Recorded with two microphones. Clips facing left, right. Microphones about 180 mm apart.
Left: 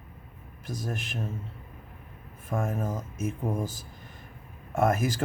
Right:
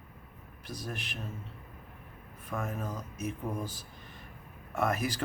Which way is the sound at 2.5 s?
45° left (ahead or behind).